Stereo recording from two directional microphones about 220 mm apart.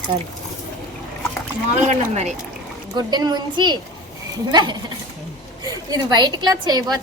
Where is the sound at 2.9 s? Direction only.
20° right (ahead or behind).